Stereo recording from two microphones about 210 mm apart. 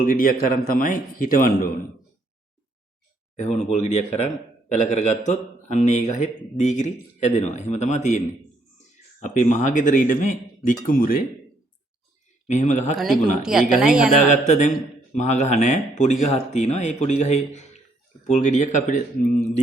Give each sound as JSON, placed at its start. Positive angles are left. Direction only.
{"t": 0.0, "sound": "a man's voice", "side_deg": 40}
{"t": 3.3, "sound": "a man's voice", "side_deg": 35}
{"t": 9.2, "sound": "a man's voice", "side_deg": 35}
{"t": 12.5, "sound": "a man's voice", "side_deg": 35}
{"t": 13.4, "sound": "speech", "side_deg": -5}
{"t": 14.2, "sound": "a man's voice", "side_deg": 35}